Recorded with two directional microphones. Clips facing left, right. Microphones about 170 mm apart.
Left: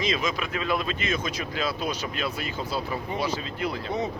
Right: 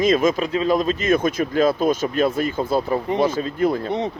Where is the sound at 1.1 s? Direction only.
50° right (ahead or behind).